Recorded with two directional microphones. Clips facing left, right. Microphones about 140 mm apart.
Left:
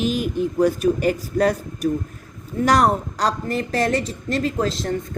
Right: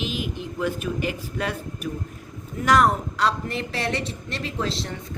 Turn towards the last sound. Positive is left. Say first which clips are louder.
# left 6 dB
turn(degrees=45)  # may be behind; listen again after turning